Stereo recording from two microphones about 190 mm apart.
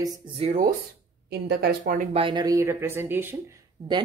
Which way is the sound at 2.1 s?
25° right (ahead or behind).